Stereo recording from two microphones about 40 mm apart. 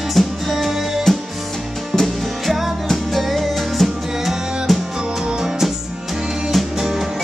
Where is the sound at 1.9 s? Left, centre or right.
Centre.